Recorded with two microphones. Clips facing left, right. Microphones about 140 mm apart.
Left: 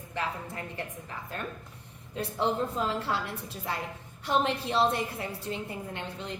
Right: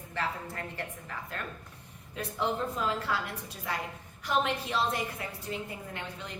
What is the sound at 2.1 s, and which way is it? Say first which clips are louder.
A woman's voice: left 3 dB; 30° left (ahead or behind).